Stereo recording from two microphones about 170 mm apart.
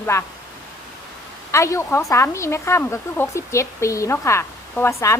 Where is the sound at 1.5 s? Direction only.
15° left (ahead or behind).